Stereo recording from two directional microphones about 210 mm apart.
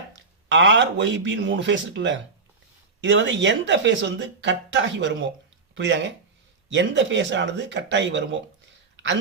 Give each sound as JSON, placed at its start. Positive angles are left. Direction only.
{"t": 0.2, "sound": "speech", "side_deg": -60}